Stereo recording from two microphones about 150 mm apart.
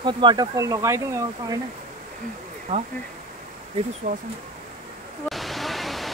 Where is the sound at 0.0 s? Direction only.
30° right (ahead or behind).